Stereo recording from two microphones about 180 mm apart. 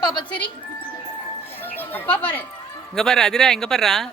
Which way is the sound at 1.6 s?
10° left (ahead or behind).